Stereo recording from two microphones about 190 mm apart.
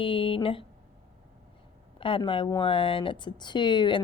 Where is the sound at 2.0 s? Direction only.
25° left (ahead or behind).